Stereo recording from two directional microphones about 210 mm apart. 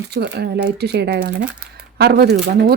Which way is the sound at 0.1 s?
50° right (ahead or behind).